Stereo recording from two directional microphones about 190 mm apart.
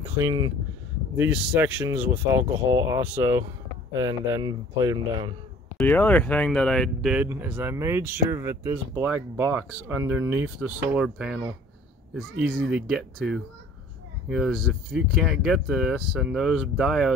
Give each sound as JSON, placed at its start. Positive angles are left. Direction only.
{"t": 0.2, "sound": "speech", "side_deg": -20}
{"t": 1.1, "sound": "speech", "side_deg": -10}
{"t": 5.8, "sound": "speech", "side_deg": 10}